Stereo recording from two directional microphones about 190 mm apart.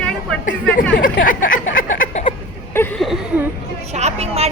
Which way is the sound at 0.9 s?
45° left (ahead or behind).